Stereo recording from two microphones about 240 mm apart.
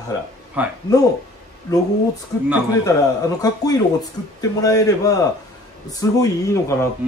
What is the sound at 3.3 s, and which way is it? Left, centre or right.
Speech, centre.